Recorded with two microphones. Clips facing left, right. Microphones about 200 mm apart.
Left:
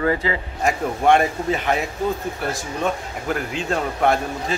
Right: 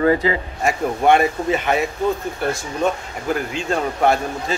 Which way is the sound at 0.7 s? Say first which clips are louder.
Right 1 dB; centre (ahead or behind).